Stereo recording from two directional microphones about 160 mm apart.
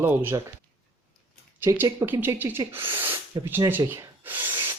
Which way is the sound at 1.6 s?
20° right (ahead or behind).